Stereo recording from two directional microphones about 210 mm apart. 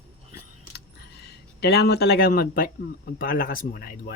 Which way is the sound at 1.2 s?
50° left (ahead or behind).